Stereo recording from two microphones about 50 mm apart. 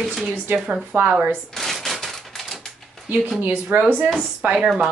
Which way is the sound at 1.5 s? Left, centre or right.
Centre.